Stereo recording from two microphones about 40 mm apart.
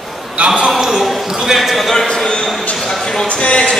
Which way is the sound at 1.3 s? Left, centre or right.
Centre.